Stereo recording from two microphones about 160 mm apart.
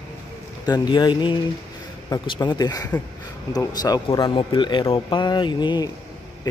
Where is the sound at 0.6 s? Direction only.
25° left (ahead or behind).